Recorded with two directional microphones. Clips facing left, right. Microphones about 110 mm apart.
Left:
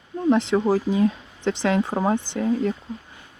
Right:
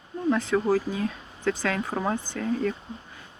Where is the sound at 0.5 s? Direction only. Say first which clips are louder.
Left 4 dB; 25° left (ahead or behind).